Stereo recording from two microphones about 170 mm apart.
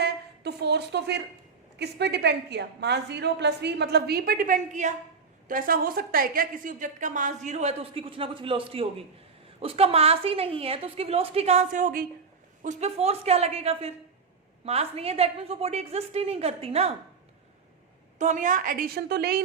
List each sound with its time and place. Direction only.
0.0 s a sound: 75° right (ahead or behind)
1.8 s a woman's voice: 80° right; by 12.0 s 50° right (ahead or behind)
12.6 s a woman's voice: 40° right (ahead or behind)
18.2 s a woman's voice: 45° right (ahead or behind); by 19.4 s 70° right (ahead or behind)